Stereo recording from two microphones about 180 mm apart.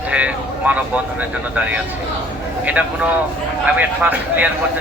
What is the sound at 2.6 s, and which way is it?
Speech, 10° right (ahead or behind).